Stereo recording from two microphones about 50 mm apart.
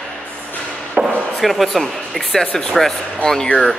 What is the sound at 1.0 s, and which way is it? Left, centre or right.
Chop, right.